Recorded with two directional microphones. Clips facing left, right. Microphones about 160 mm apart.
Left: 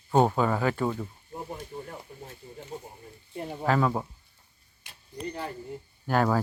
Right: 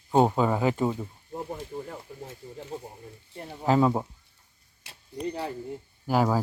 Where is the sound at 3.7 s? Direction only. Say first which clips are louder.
Right 3 dB; 20° right (ahead or behind).